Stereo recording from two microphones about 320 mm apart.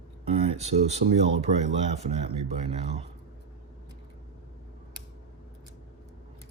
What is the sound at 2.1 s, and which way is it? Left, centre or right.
Speech, centre.